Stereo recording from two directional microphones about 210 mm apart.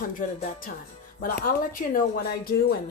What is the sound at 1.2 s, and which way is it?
Speech, 40° left (ahead or behind).